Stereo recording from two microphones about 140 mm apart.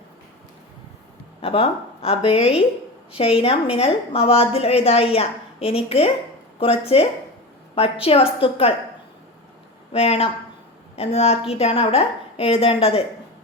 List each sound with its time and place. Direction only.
1.4 s a woman's voice: 40° left (ahead or behind)
9.9 s a woman's voice: 45° left (ahead or behind)